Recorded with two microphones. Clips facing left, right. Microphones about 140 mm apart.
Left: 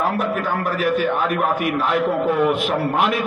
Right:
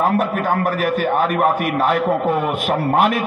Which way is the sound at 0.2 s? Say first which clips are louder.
Right 3 dB; 45° right (ahead or behind).